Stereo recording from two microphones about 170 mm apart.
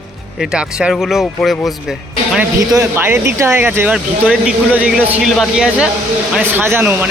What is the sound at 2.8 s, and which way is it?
Speech, 15° right (ahead or behind).